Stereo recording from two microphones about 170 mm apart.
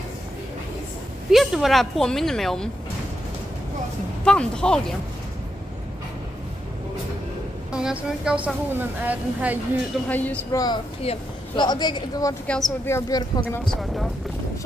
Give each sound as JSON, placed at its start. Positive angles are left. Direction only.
{"t": 1.3, "sound": "a woman's voice", "side_deg": 0}
{"t": 4.2, "sound": "a woman's voice", "side_deg": 5}
{"t": 7.7, "sound": "a woman's voice", "side_deg": -5}
{"t": 10.0, "sound": "speech", "side_deg": 10}
{"t": 11.0, "sound": "speech", "side_deg": 30}
{"t": 12.4, "sound": "a woman's voice", "side_deg": 0}
{"t": 12.8, "sound": "speech", "side_deg": 15}
{"t": 13.7, "sound": "a woman's voice", "side_deg": 0}